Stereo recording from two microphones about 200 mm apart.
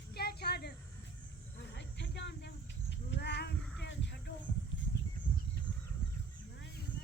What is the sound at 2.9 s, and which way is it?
Livestock, 60° left (ahead or behind).